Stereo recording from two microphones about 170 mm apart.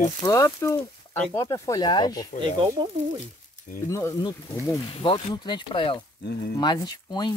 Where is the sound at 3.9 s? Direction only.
15° left (ahead or behind).